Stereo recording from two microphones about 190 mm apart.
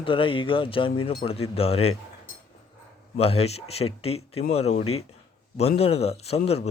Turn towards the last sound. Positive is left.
turn(degrees=30)  # may be behind; listen again after turning